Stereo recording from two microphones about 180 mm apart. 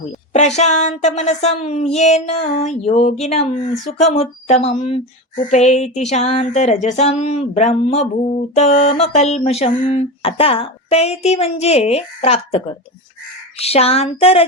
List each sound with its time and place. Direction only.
0.3 s speech: 40° left (ahead or behind)